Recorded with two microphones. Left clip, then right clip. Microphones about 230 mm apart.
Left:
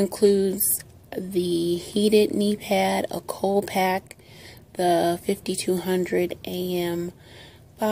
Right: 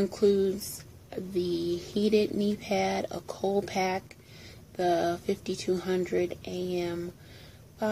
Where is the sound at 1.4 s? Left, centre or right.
Centre.